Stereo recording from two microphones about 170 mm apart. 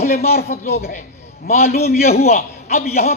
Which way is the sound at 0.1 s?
40° left (ahead or behind).